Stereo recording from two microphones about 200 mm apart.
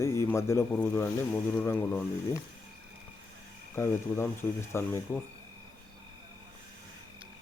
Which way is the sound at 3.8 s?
10° left (ahead or behind).